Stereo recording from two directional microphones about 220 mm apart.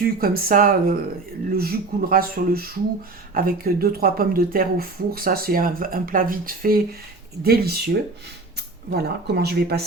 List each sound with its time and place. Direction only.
0.0 s speech: 40° right (ahead or behind)
8.9 s speech: 45° right (ahead or behind)